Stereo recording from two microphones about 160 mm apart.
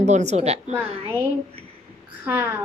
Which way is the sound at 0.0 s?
45° right (ahead or behind).